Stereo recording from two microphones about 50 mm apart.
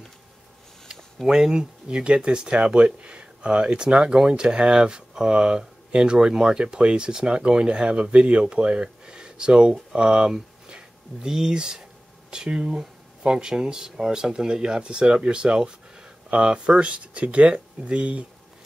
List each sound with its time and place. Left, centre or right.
1.2 s speech: centre